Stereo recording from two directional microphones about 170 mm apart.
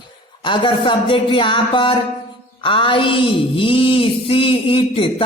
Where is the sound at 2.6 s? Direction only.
30° left (ahead or behind).